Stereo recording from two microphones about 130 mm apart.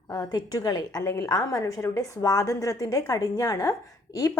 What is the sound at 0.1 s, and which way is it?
A woman's voice, 30° left (ahead or behind).